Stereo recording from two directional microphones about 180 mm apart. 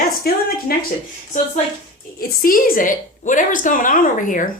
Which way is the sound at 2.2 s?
50° left (ahead or behind).